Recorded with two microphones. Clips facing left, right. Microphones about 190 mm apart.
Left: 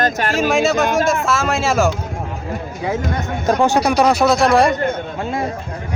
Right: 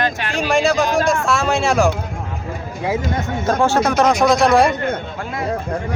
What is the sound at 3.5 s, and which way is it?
Speech, 15° left (ahead or behind).